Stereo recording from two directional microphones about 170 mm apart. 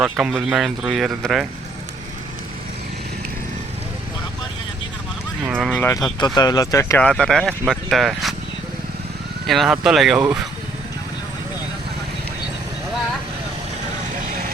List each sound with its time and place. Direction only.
0.0 s speech: 5° right (ahead or behind)
5.4 s speech: 10° right (ahead or behind)
5.6 s speech: 5° left (ahead or behind)
6.1 s speech: 25° left (ahead or behind)
7.0 s speech: 5° left (ahead or behind)
9.5 s speech: centre (ahead or behind)